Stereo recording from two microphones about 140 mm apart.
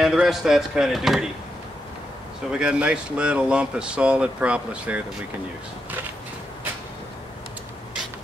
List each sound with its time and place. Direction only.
0.0 s speech: centre (ahead or behind)
2.5 s speech: 5° right (ahead or behind)